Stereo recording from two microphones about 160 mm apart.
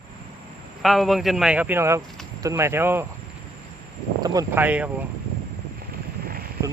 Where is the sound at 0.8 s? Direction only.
Centre (ahead or behind).